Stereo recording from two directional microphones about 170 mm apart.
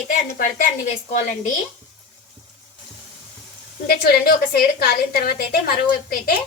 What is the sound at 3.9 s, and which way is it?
A woman's voice, 65° left (ahead or behind).